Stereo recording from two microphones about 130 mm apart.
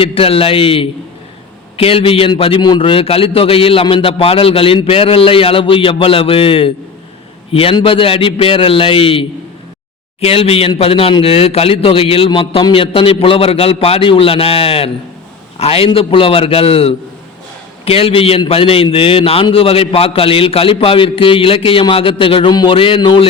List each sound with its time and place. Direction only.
0.0 s a man's voice: 45° left (ahead or behind)